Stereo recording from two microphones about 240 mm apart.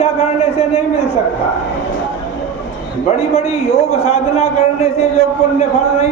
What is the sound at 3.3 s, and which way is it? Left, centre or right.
A man's voice, left.